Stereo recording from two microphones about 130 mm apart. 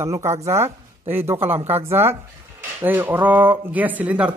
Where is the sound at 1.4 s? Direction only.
50° right (ahead or behind).